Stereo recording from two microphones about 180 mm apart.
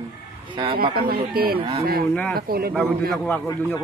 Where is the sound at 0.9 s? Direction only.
55° right (ahead or behind).